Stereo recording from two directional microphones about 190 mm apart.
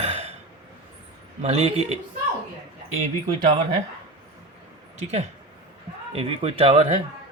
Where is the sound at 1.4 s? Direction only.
35° right (ahead or behind).